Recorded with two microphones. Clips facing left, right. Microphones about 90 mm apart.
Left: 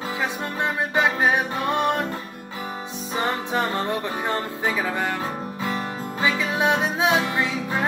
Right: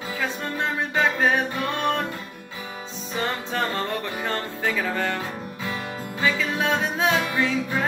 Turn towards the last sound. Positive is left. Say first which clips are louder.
# right 1 dB
turn(degrees=20)  # may be behind; listen again after turning